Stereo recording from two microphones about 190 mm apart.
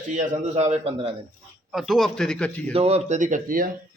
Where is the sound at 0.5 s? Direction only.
35° right (ahead or behind).